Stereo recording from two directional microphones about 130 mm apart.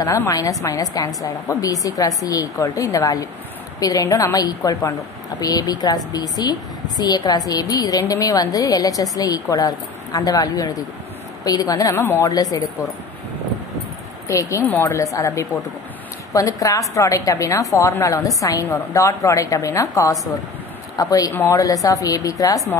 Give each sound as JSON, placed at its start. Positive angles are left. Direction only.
{"t": 0.0, "sound": "a woman's voice", "side_deg": 25}
{"t": 14.2, "sound": "a woman's voice", "side_deg": 25}